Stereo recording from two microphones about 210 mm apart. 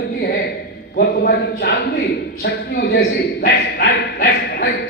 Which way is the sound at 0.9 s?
50° left (ahead or behind).